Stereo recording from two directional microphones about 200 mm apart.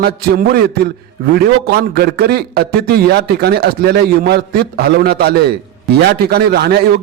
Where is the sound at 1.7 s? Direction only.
50° right (ahead or behind).